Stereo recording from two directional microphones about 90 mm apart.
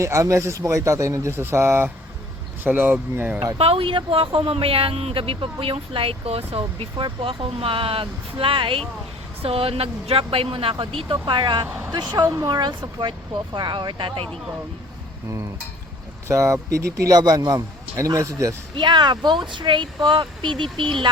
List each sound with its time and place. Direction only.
0.0 s a man's voice: 35° right (ahead or behind)
3.6 s a woman's voice: 85° right; by 11.7 s 60° right (ahead or behind)
11.9 s speech: 45° right (ahead or behind); by 14.3 s 65° right (ahead or behind)
16.3 s a man's voice: 35° right (ahead or behind)
18.8 s speech: 55° right (ahead or behind)